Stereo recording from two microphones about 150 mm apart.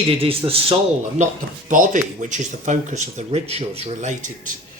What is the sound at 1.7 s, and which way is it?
Speech, 60° right (ahead or behind).